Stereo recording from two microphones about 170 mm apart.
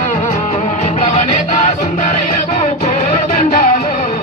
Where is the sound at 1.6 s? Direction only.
50° left (ahead or behind).